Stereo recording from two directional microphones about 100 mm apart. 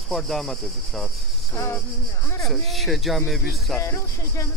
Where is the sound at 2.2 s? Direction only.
25° left (ahead or behind).